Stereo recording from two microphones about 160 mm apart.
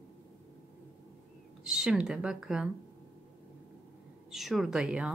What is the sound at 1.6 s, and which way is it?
Speech, 5° right (ahead or behind).